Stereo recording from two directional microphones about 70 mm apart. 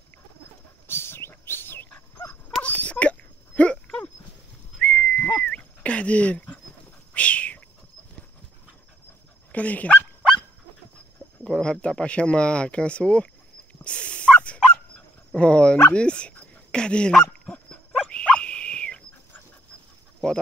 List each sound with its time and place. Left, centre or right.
0.8 s dog: left
2.6 s a sound: centre
9.5 s speech: left
11.4 s speech: centre
13.8 s fowl: centre
15.9 s speech: centre
17.1 s dog: centre
20.2 s a sound: centre